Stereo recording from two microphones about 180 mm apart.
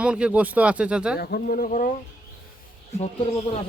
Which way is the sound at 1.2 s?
55° left (ahead or behind).